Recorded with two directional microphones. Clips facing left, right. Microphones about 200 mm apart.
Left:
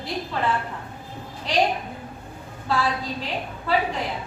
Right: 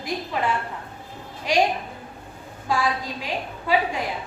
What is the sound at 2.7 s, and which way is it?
A woman's voice, 10° right (ahead or behind).